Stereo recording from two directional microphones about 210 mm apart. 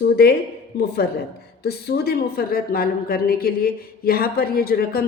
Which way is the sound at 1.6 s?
50° left (ahead or behind).